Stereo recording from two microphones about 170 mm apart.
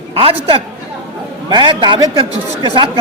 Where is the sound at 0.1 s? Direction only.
35° right (ahead or behind).